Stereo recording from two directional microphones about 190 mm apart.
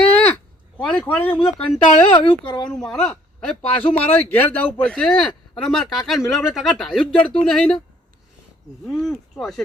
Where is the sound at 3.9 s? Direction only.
30° left (ahead or behind).